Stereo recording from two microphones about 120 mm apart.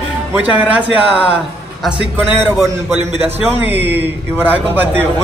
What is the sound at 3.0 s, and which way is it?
Speech, 65° right (ahead or behind).